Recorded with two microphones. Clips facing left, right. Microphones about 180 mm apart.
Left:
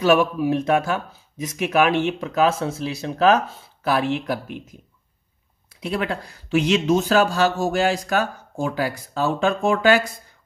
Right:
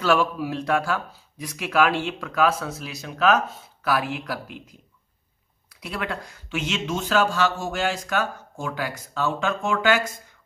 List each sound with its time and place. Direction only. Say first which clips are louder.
0.0 s speech: left 4 dB; 20° left (ahead or behind)
5.8 s speech: left 5 dB; 30° left (ahead or behind)